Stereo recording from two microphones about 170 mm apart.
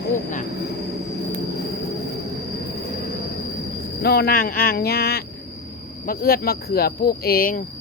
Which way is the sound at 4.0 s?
70° left (ahead or behind).